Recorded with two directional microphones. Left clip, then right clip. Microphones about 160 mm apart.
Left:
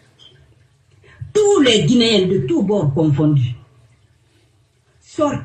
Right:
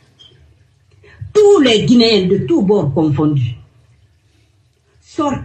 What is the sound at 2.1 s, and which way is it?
Speech, 20° left (ahead or behind).